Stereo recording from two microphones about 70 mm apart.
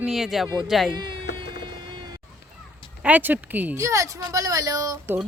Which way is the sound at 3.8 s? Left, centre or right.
Right.